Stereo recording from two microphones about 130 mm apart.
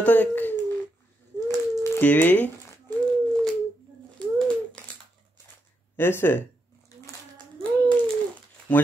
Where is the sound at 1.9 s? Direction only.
15° left (ahead or behind).